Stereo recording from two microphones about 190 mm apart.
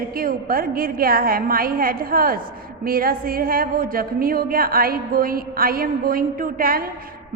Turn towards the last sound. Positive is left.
turn(degrees=-50)  # may be behind; listen again after turning